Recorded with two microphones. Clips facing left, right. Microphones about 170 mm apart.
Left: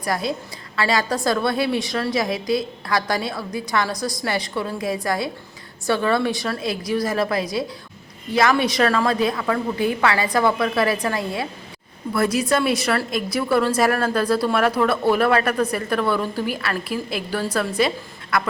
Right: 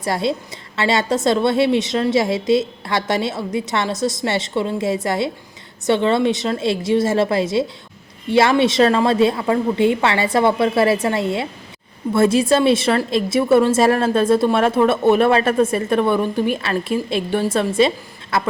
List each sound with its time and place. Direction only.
0.0 s a woman's voice: 25° right (ahead or behind)